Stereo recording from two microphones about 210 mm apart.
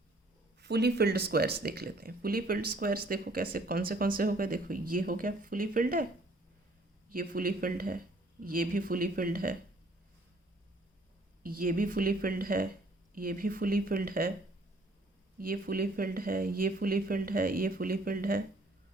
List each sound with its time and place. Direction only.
0.6 s speech: 50° right (ahead or behind)
7.1 s speech: 40° right (ahead or behind)
11.4 s speech: 40° right (ahead or behind)
15.4 s speech: 45° right (ahead or behind)